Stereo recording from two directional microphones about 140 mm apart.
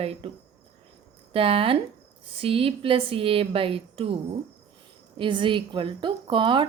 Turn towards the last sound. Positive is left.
turn(degrees=-35)  # may be behind; listen again after turning